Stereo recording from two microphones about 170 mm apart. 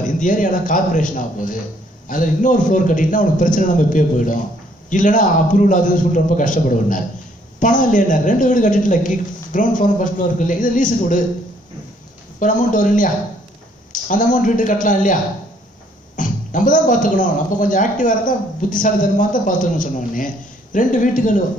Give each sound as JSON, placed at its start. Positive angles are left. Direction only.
{"t": 0.0, "sound": "a man's voice", "side_deg": 50}
{"t": 12.4, "sound": "a man's voice", "side_deg": 50}
{"t": 16.2, "sound": "a man's voice", "side_deg": 50}